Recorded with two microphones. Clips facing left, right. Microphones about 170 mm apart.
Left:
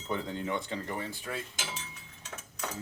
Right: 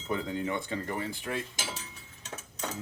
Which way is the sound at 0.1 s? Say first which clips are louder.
Right 2 dB; 5° right (ahead or behind).